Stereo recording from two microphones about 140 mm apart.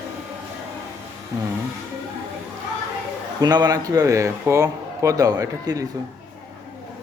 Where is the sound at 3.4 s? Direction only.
30° right (ahead or behind).